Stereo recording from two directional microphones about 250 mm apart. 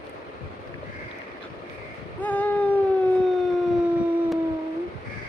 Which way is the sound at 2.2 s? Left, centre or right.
Centre.